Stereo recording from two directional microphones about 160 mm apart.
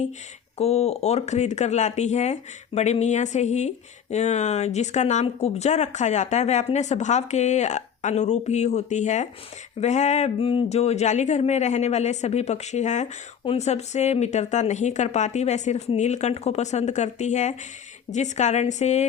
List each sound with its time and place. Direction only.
0.6 s speech: 40° left (ahead or behind)